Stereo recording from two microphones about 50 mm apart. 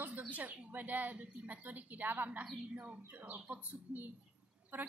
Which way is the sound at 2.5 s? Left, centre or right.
Right.